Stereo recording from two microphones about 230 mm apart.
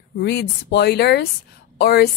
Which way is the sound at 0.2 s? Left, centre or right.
Left.